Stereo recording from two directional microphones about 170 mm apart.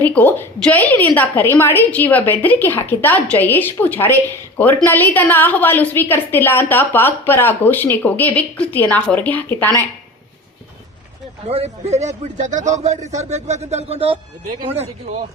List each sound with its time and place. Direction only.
0.0 s a woman's voice: 10° left (ahead or behind)
11.4 s a man's voice: 40° right (ahead or behind)